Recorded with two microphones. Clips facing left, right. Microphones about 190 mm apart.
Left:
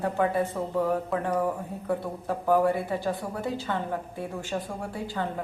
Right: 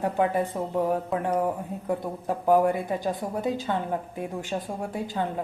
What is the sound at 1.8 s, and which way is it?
A woman's voice, 15° right (ahead or behind).